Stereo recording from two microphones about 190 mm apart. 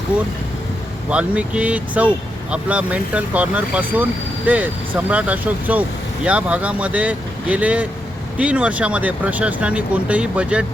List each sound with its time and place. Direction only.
1.1 s speech: 5° right (ahead or behind)